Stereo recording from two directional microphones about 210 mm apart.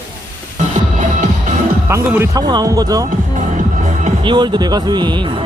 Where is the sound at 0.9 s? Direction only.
35° right (ahead or behind).